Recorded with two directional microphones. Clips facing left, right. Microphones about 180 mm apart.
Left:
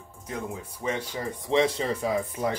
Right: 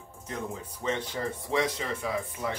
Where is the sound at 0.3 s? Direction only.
10° left (ahead or behind).